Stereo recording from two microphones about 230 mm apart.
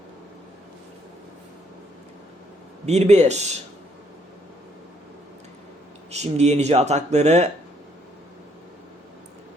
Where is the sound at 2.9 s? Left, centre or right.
Right.